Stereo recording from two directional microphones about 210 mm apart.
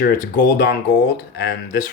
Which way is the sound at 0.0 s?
50° left (ahead or behind).